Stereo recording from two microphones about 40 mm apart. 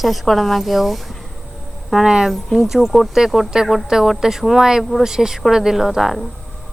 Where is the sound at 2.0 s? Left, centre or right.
Centre.